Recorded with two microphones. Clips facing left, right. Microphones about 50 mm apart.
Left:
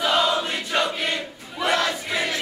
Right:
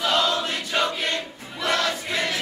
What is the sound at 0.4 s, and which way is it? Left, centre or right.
Crowd, centre.